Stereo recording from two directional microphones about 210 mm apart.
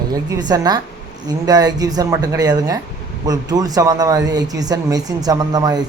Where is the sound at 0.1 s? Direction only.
20° right (ahead or behind).